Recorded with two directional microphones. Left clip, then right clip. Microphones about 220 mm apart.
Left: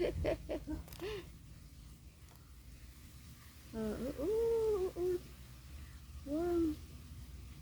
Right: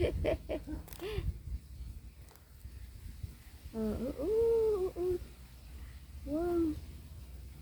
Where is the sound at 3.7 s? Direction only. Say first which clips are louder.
Right 3 dB; 5° left (ahead or behind).